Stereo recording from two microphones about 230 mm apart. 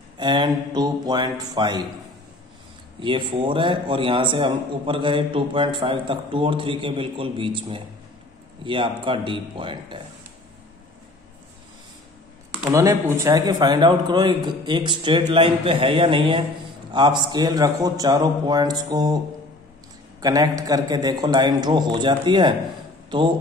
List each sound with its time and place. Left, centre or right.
0.2 s a man's voice: centre
3.0 s a man's voice: right
12.7 s a man's voice: centre
20.2 s a man's voice: centre
23.0 s a sound: right